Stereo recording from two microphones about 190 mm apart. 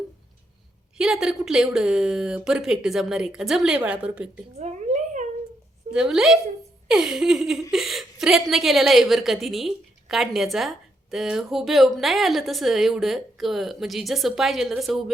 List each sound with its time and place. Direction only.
0.9 s speech: 5° right (ahead or behind)
4.6 s a sound: 35° right (ahead or behind)
5.9 s speech: 5° right (ahead or behind)